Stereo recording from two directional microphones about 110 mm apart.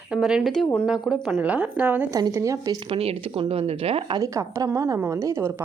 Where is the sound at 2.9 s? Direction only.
60° right (ahead or behind).